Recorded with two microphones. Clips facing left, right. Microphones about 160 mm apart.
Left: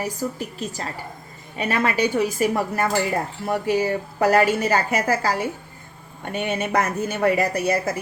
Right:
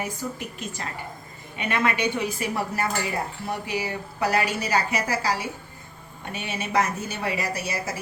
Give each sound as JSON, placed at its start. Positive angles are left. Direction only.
{"t": 0.0, "sound": "a woman's voice", "side_deg": 35}